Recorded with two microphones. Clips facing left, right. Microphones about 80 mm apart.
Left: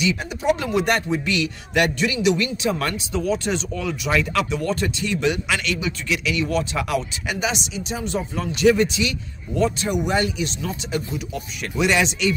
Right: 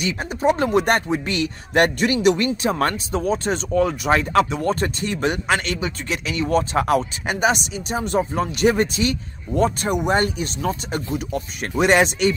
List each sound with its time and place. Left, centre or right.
0.0 s speech: right